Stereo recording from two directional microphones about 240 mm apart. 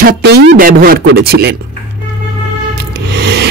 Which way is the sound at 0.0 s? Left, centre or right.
Right.